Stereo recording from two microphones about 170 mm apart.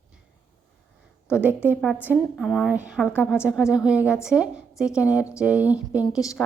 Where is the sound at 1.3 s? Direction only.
10° right (ahead or behind).